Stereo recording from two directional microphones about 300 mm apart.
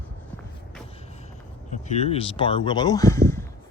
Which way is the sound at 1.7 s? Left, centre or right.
Left.